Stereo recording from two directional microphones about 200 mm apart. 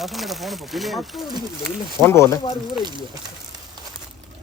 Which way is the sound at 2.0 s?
10° left (ahead or behind).